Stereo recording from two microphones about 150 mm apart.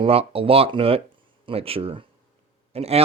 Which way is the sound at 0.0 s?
40° right (ahead or behind).